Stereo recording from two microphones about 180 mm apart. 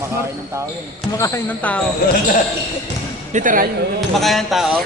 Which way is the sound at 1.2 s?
15° left (ahead or behind).